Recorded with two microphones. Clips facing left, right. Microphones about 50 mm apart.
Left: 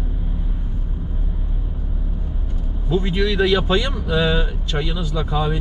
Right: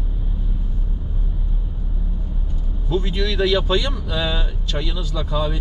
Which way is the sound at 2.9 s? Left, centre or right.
Centre.